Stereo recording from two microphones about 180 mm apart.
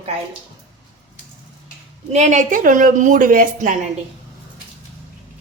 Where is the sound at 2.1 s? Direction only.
40° right (ahead or behind).